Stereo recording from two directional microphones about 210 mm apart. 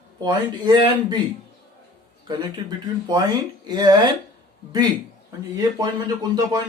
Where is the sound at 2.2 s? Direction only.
20° right (ahead or behind).